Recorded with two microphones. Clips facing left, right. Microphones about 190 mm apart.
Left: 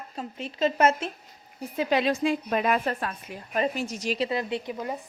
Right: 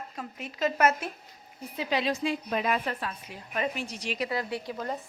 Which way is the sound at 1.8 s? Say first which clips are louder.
Left 5 dB; 50° left (ahead or behind).